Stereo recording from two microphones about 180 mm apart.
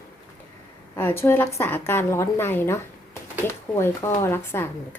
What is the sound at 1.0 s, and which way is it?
A woman's voice, 10° left (ahead or behind).